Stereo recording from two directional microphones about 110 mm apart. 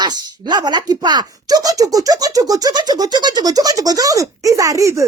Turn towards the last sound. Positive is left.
turn(degrees=-30)  # may be behind; listen again after turning